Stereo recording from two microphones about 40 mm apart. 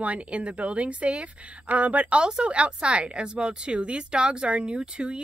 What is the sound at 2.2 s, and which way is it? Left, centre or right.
Speech, right.